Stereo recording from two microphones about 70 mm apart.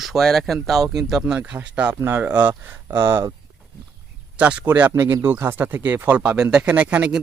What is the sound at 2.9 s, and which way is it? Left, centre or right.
Speech, right.